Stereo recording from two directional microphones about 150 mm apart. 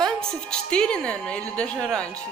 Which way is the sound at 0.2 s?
5° left (ahead or behind).